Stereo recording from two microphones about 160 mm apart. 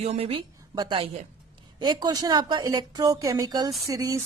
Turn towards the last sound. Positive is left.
turn(degrees=-20)  # may be behind; listen again after turning